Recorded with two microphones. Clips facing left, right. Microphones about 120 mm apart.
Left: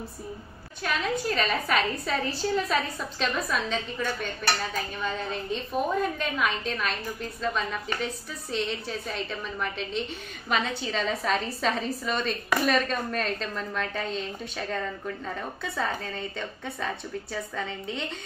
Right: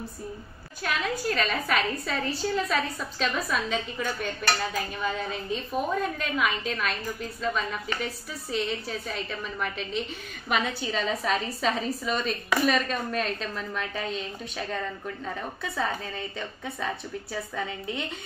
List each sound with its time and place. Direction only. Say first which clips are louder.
0.8 s a woman's voice: left 1 dB; centre (ahead or behind)